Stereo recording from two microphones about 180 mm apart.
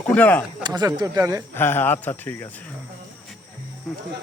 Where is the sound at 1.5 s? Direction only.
10° left (ahead or behind).